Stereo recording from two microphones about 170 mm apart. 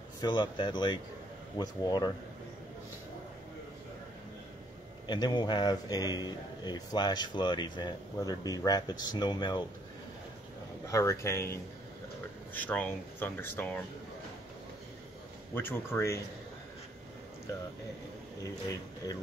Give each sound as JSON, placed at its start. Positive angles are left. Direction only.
{"t": 0.2, "sound": "a man's voice", "side_deg": 25}
{"t": 5.0, "sound": "a man's voice", "side_deg": 25}
{"t": 10.9, "sound": "speech", "side_deg": 15}
{"t": 15.5, "sound": "speech", "side_deg": 15}
{"t": 19.0, "sound": "a man's voice", "side_deg": 20}